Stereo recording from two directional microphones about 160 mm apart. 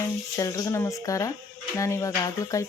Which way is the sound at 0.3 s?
20° left (ahead or behind).